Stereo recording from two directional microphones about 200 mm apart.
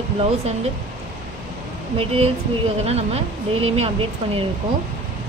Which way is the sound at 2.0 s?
30° right (ahead or behind).